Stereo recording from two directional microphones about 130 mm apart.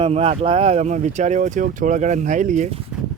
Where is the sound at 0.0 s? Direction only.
55° right (ahead or behind); by 2.6 s 75° right (ahead or behind).